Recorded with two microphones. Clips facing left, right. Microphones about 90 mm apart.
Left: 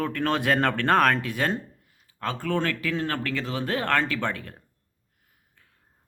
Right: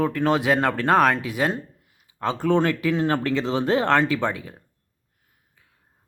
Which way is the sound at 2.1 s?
20° right (ahead or behind).